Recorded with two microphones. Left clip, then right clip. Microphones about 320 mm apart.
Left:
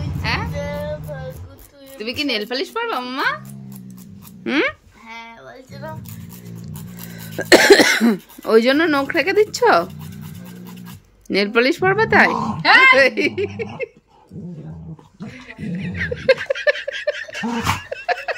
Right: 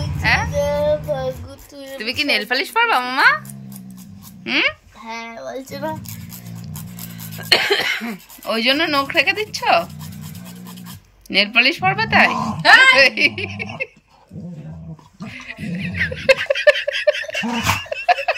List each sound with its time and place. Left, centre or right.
0.2 s a sound: centre
0.6 s child singing: right
2.0 s speech: centre
4.5 s speech: centre
7.8 s speech: left
11.2 s speech: centre
15.2 s a sound: centre